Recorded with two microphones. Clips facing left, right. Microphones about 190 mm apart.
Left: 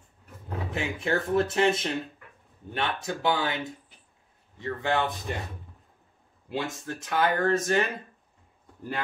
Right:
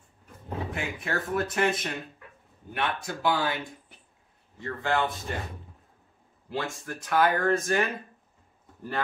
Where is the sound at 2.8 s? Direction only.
20° left (ahead or behind).